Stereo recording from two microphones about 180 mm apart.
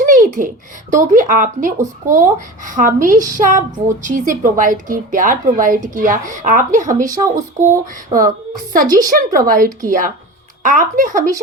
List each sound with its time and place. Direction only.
0.0 s a woman's voice: 50° right (ahead or behind)